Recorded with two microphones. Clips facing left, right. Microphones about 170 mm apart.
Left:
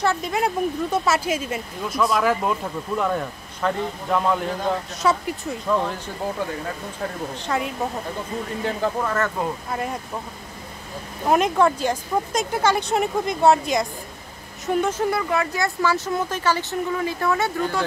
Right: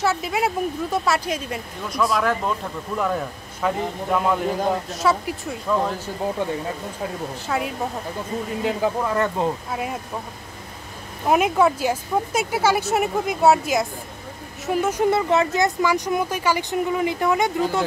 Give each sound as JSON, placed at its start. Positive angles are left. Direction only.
{"t": 0.0, "sound": "a man's voice", "side_deg": -5}
{"t": 7.4, "sound": "a man's voice", "side_deg": -5}
{"t": 9.7, "sound": "a man's voice", "side_deg": -5}
{"t": 11.2, "sound": "a man's voice", "side_deg": -5}
{"t": 15.0, "sound": "speech", "side_deg": -25}